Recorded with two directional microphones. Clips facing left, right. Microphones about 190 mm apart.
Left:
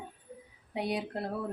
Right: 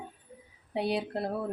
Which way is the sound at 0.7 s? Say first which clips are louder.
Right 3 dB; 30° right (ahead or behind).